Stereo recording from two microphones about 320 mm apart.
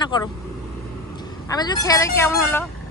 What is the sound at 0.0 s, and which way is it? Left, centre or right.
Speech, centre.